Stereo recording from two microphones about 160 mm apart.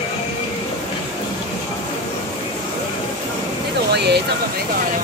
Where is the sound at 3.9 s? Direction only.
90° right.